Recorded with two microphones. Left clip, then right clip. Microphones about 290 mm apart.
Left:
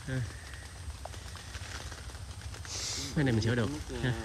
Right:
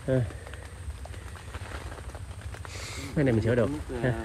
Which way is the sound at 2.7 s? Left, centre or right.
Centre.